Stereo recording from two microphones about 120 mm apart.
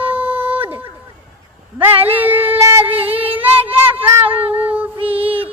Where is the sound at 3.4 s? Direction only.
15° right (ahead or behind).